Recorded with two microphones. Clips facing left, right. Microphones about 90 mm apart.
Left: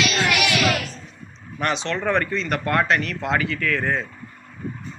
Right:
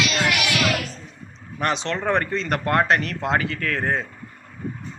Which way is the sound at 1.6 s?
35° right (ahead or behind).